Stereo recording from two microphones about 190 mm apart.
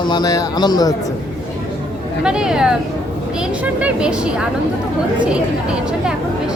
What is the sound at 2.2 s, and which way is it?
Speech, 5° right (ahead or behind).